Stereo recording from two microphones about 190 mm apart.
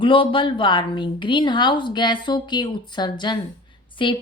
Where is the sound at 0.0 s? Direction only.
25° left (ahead or behind).